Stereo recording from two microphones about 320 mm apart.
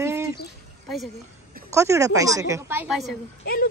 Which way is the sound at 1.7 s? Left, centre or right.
Centre.